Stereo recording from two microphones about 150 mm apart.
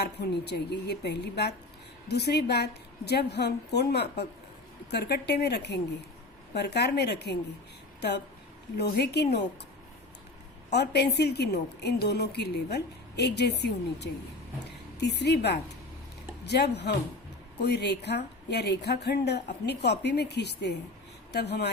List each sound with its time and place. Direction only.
0.0 s a woman's voice: 90° left
8.8 s a woman's voice: 90° left
10.8 s a woman's voice: 90° left